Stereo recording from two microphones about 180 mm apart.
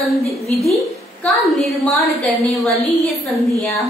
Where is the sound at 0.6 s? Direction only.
Centre (ahead or behind).